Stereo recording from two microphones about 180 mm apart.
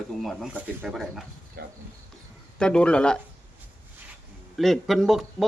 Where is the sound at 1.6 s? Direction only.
60° right (ahead or behind).